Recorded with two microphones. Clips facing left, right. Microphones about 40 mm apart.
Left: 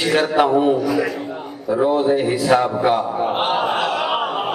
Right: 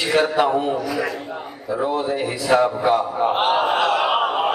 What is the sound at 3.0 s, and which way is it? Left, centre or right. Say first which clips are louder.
Chuckle: even; centre.